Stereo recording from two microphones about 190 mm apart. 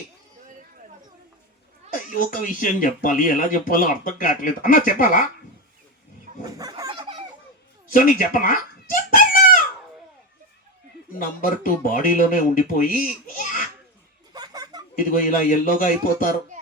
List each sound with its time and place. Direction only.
1.9 s speech: 45° left (ahead or behind)
6.4 s fowl: 20° right (ahead or behind)
7.9 s speech: 45° left (ahead or behind)
11.1 s speech: 45° left (ahead or behind)
14.3 s a sound: 20° right (ahead or behind)
14.9 s speech: 45° left (ahead or behind)